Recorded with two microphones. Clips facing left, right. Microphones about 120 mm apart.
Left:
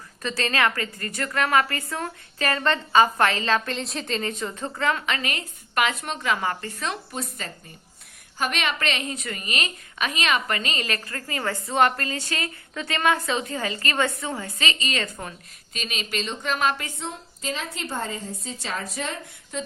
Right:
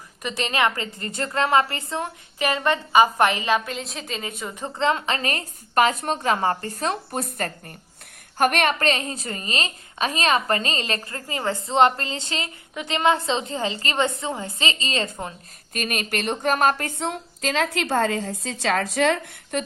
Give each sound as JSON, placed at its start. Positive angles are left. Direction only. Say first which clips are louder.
{"t": 0.2, "sound": "a woman's voice", "louder": "right 1 dB", "side_deg": -15}
{"t": 4.6, "sound": "a woman's voice", "louder": "right 3 dB", "side_deg": -25}
{"t": 15.7, "sound": "speech", "louder": "right 4 dB", "side_deg": -50}
{"t": 17.0, "sound": "a woman's voice", "louder": "right 6 dB", "side_deg": -70}